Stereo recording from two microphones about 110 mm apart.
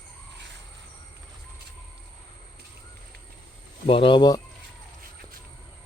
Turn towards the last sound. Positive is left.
turn(degrees=45)  # may be behind; listen again after turning